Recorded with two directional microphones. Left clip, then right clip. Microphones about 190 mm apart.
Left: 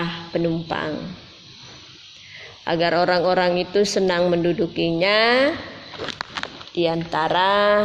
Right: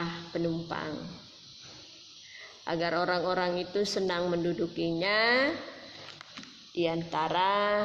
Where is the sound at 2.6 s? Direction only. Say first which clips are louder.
Left 10 dB; 40° left (ahead or behind).